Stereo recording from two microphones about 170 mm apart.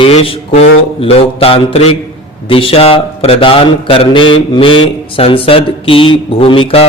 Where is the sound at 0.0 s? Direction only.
35° left (ahead or behind).